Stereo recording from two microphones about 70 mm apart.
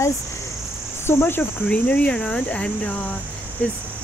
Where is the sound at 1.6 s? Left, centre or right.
Centre.